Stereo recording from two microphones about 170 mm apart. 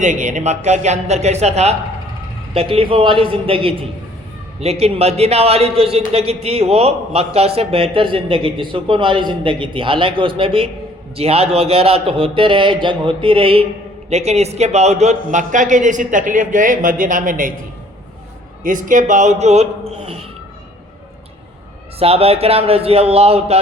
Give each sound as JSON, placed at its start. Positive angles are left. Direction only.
{"t": 0.0, "sound": "a man's voice", "side_deg": -45}
{"t": 18.6, "sound": "a man's voice", "side_deg": -50}
{"t": 21.9, "sound": "a man's voice", "side_deg": -35}